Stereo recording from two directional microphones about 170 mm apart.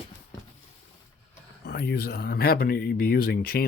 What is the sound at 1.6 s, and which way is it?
Speech, 70° left (ahead or behind).